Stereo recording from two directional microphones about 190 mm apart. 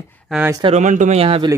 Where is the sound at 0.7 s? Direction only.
40° right (ahead or behind).